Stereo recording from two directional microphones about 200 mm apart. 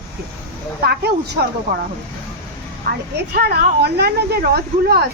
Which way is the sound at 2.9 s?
50° right (ahead or behind).